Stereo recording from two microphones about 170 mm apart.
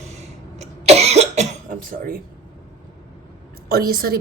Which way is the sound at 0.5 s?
40° right (ahead or behind).